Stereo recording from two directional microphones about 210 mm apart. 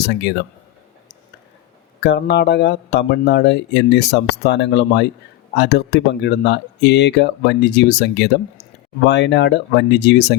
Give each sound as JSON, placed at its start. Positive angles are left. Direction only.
{"t": 0.1, "sound": "speech", "side_deg": 55}
{"t": 2.0, "sound": "speech", "side_deg": 55}